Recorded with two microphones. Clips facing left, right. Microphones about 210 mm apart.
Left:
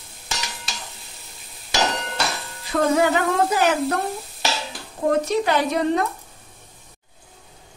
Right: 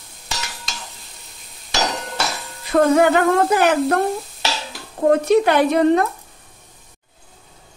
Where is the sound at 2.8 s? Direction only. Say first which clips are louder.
Right 4 dB; 55° right (ahead or behind).